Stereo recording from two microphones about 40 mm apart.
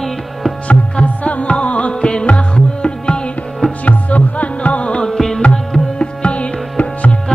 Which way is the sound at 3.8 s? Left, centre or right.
Left.